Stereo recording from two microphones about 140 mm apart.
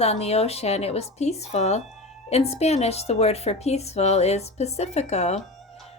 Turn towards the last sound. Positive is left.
turn(degrees=50)  # may be behind; listen again after turning